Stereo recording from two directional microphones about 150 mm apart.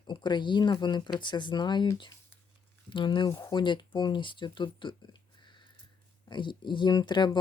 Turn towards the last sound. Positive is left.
turn(degrees=30)  # may be behind; listen again after turning